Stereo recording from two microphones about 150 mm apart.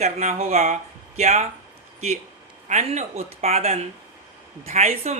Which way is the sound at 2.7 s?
50° right (ahead or behind).